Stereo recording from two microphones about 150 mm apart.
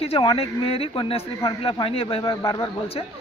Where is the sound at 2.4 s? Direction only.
25° left (ahead or behind).